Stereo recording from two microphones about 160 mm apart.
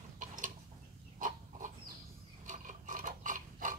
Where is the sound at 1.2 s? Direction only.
55° right (ahead or behind).